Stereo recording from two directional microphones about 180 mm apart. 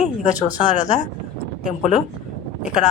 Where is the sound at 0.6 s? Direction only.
40° left (ahead or behind).